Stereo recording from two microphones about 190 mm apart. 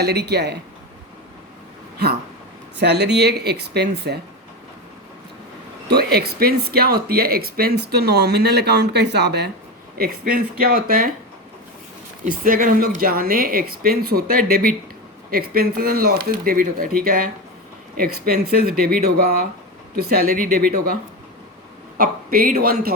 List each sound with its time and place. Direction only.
0.0 s speech: 60° right (ahead or behind)
2.7 s speech: 60° right (ahead or behind)
5.9 s speech: 55° right (ahead or behind)
12.2 s speech: 45° right (ahead or behind)